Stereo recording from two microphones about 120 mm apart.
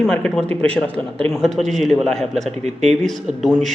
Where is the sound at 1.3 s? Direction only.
Centre (ahead or behind).